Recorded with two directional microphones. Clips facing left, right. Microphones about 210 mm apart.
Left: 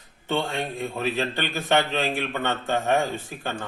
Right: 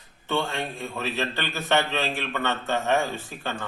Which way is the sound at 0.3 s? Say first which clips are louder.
Left 1 dB; 15° left (ahead or behind).